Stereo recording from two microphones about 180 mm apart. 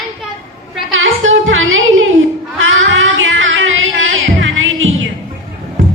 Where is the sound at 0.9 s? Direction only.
90° right.